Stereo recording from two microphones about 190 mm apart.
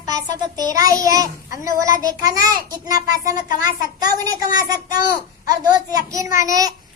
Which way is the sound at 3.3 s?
45° left (ahead or behind).